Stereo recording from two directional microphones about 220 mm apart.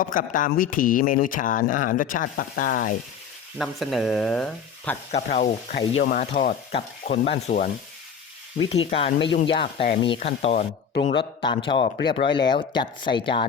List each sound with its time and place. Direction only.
0.0 s speech: 40° left (ahead or behind)
3.6 s speech: centre (ahead or behind)
5.1 s speech: 35° left (ahead or behind)
8.9 s speech: 30° left (ahead or behind)